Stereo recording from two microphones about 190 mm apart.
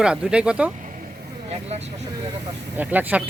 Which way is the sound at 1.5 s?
35° right (ahead or behind).